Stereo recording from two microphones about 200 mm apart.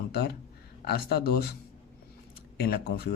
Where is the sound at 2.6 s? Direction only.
55° left (ahead or behind).